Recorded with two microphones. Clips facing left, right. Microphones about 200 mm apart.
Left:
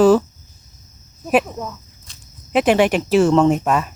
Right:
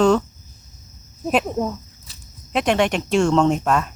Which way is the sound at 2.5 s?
5° left (ahead or behind).